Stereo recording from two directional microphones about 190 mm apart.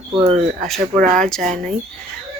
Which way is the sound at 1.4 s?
40° right (ahead or behind).